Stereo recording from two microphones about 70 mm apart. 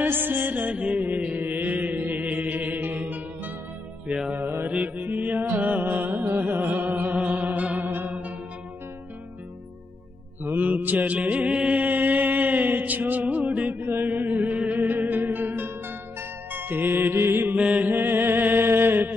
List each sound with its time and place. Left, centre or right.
0.0 s music: right
4.3 s mantra: right
4.6 s music: right
10.4 s mantra: right
17.6 s mantra: centre